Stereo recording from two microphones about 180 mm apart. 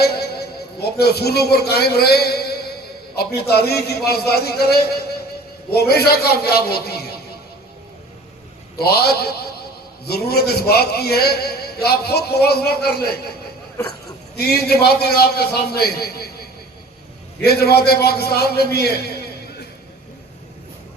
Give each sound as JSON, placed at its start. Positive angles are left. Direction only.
{"t": 0.0, "sound": "a man's voice", "side_deg": 60}
{"t": 8.8, "sound": "a man's voice", "side_deg": 60}
{"t": 13.8, "sound": "speech", "side_deg": 15}
{"t": 14.3, "sound": "a man's voice", "side_deg": 60}
{"t": 17.4, "sound": "a man's voice", "side_deg": 60}